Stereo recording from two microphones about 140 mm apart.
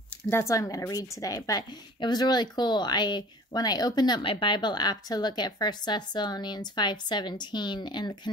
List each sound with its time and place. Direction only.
0.3 s a woman's voice: 20° left (ahead or behind)